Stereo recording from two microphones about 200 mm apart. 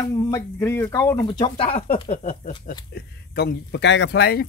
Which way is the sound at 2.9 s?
55° left (ahead or behind).